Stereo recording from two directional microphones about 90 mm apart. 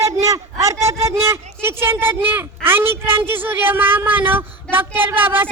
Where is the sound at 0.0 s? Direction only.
35° right (ahead or behind).